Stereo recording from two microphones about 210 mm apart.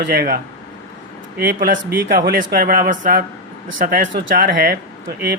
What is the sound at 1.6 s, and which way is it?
A man's voice, 45° right (ahead or behind).